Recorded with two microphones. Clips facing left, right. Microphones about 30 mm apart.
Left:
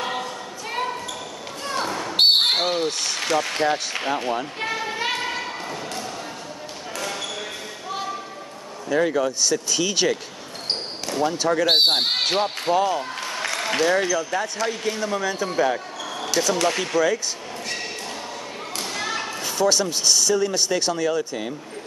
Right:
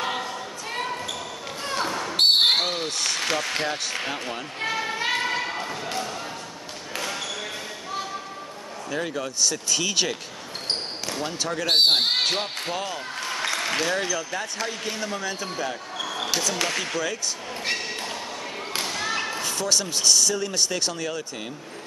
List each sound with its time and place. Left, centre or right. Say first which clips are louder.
0.0 s choir: left 1 dB; centre
0.7 s basketball bounce: left 3 dB; centre
2.4 s a sound: left 1 dB; centre
7.0 s basketball bounce: left 1 dB; centre
8.8 s speech: left 8 dB; centre
15.5 s speech: left 8 dB; centre
16.5 s speech: left 5 dB; centre
18.9 s whip: left 2 dB; centre
19.1 s basketball bounce: right 1 dB; centre
19.4 s speech: left 9 dB; centre